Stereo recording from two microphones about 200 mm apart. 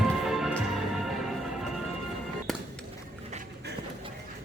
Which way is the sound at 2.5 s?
Centre (ahead or behind).